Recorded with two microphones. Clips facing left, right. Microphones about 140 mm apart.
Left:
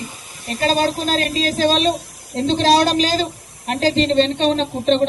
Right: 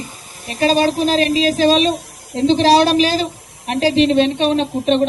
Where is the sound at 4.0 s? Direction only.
15° right (ahead or behind).